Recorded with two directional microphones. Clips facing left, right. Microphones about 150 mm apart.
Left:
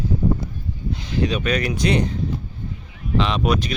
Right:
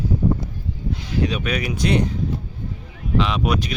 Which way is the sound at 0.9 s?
5° right (ahead or behind).